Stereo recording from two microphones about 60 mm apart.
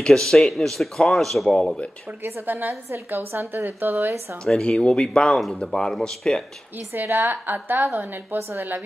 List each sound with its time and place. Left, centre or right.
0.0 s speech: centre
1.5 s speech: centre
2.2 s a woman's voice: right
4.5 s speech: centre
6.9 s a woman's voice: right
7.2 s a woman's voice: right
8.4 s a woman's voice: right